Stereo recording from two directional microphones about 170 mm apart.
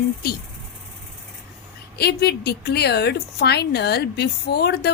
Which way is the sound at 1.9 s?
70° left (ahead or behind).